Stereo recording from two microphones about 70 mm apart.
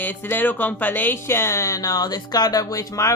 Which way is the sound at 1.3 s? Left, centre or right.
Left.